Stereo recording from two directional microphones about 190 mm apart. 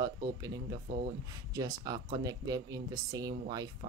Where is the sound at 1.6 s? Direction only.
20° right (ahead or behind).